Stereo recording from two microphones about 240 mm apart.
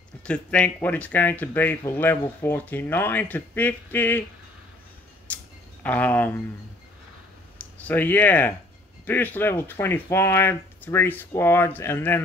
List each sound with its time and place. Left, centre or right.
0.2 s speech: centre
5.3 s a sound: centre
7.8 s speech: centre